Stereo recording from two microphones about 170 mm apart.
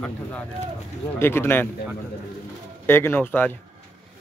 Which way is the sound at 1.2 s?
15° left (ahead or behind).